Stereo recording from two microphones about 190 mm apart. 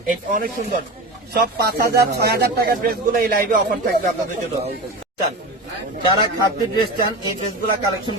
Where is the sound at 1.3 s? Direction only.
55° right (ahead or behind).